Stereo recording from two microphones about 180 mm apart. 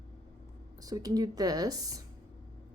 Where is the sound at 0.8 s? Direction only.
20° right (ahead or behind).